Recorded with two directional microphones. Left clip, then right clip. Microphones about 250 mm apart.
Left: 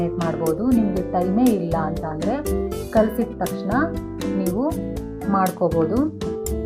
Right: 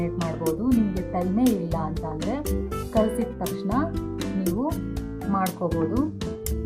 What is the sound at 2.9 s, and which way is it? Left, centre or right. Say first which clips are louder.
Speech: left 4 dB; centre.